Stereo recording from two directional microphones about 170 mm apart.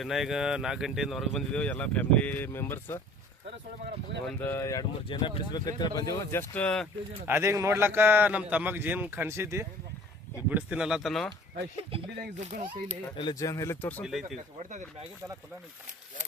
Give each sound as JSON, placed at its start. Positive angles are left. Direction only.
{"t": 0.0, "sound": "speech", "side_deg": 0}
{"t": 4.3, "sound": "speech", "side_deg": 10}
{"t": 6.5, "sound": "speech", "side_deg": 5}
{"t": 7.3, "sound": "a man's voice", "side_deg": -15}
{"t": 11.8, "sound": "speech", "side_deg": -30}
{"t": 13.1, "sound": "speech", "side_deg": 25}
{"t": 14.0, "sound": "speech", "side_deg": 0}